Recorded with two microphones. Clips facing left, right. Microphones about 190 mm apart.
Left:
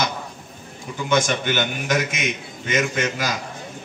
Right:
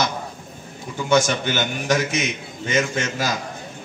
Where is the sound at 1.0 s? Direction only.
40° right (ahead or behind).